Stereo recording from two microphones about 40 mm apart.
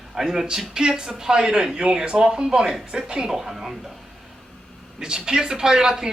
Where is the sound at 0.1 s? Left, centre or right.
Centre.